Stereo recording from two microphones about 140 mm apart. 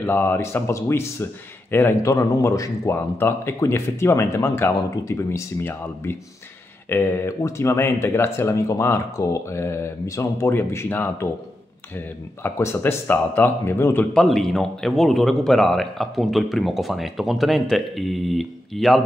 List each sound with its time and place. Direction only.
0.0 s speech: 15° left (ahead or behind)
12.4 s speech: 15° left (ahead or behind)
14.1 s a man's voice: 5° left (ahead or behind)